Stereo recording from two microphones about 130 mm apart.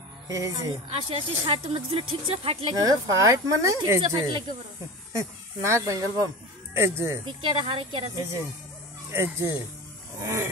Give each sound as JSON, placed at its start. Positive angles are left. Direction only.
{"t": 0.3, "sound": "speech", "side_deg": -25}
{"t": 0.8, "sound": "speech", "side_deg": -45}
{"t": 2.7, "sound": "speech", "side_deg": -30}
{"t": 4.1, "sound": "speech", "side_deg": -35}
{"t": 5.1, "sound": "speech", "side_deg": -20}
{"t": 7.2, "sound": "speech", "side_deg": -40}
{"t": 9.1, "sound": "speech", "side_deg": -20}